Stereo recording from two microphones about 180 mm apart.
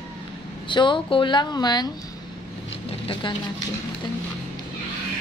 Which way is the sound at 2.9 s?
30° left (ahead or behind).